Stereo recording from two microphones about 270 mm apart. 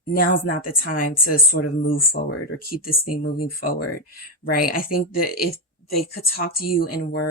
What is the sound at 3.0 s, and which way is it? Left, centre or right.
Speech, left.